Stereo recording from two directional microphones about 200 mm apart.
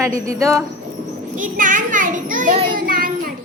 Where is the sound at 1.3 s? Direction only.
40° right (ahead or behind).